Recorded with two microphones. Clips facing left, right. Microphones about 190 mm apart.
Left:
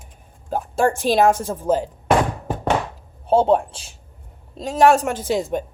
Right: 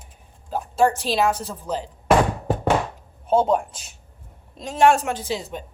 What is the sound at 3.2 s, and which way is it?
A woman's voice, 30° left (ahead or behind).